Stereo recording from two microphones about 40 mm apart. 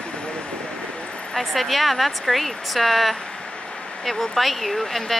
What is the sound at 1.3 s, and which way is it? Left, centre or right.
Speech, centre.